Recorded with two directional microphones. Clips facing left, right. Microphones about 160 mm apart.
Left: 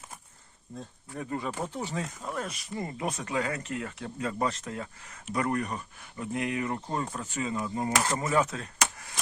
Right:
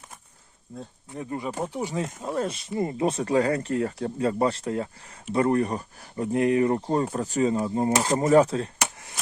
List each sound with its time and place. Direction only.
1.1 s speech: 20° right (ahead or behind)
2.2 s speech: 30° right (ahead or behind)